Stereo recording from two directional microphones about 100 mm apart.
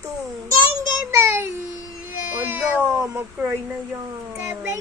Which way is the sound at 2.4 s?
20° right (ahead or behind).